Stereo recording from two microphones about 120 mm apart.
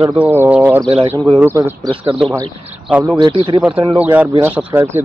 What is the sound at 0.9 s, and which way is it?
Speech, 55° right (ahead or behind).